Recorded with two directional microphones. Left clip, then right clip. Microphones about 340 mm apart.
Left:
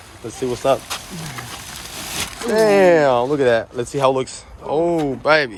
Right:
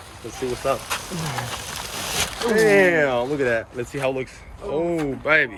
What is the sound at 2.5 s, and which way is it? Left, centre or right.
Speech, left.